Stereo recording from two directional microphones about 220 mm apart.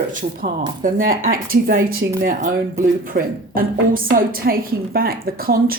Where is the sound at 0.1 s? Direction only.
35° right (ahead or behind).